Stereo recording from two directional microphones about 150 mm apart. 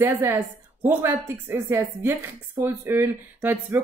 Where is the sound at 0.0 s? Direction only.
15° right (ahead or behind).